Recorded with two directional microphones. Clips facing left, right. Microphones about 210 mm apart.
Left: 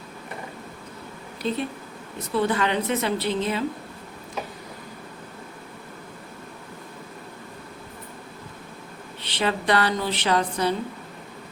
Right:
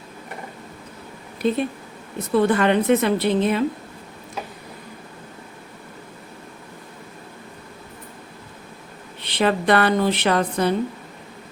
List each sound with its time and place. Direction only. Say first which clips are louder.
1.4 s a woman's voice: right 6 dB; 55° right (ahead or behind)
9.2 s a woman's voice: right 5 dB; 55° right (ahead or behind)